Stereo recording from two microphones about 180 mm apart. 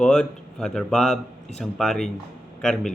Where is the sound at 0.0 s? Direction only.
5° left (ahead or behind).